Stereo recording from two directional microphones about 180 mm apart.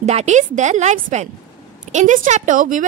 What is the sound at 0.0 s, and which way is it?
A woman's voice, 40° right (ahead or behind).